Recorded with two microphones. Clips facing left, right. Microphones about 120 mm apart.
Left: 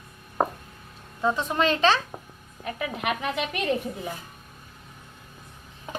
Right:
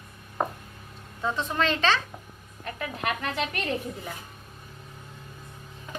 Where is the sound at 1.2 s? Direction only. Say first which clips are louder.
Left 3 dB; 15° left (ahead or behind).